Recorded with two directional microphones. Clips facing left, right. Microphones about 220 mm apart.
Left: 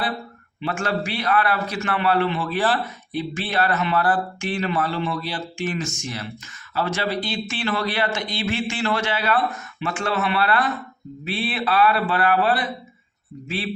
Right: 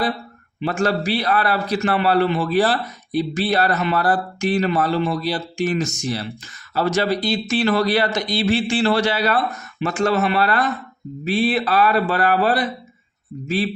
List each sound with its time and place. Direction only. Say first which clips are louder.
0.6 s a man's voice: right 5 dB; 40° right (ahead or behind)